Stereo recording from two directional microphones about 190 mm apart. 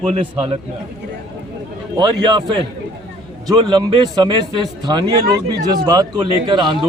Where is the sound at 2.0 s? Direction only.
25° right (ahead or behind).